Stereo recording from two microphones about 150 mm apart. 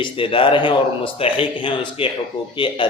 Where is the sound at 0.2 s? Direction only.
35° left (ahead or behind).